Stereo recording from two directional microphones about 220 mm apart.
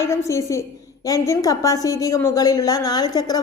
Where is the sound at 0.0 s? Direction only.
15° left (ahead or behind).